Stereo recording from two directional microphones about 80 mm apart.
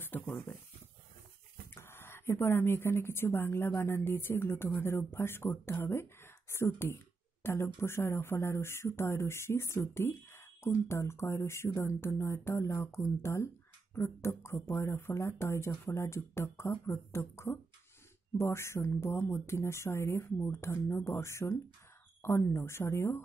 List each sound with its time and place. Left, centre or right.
0.0 s speech: left
1.7 s speech: left